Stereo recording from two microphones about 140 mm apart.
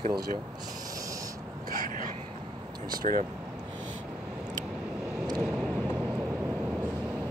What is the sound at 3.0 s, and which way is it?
Speech, 55° right (ahead or behind).